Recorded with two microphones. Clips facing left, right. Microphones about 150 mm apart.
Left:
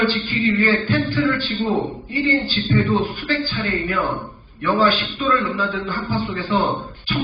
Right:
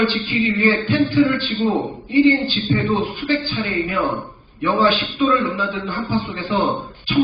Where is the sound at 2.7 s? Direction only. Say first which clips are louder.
Left 1 dB; 20° right (ahead or behind).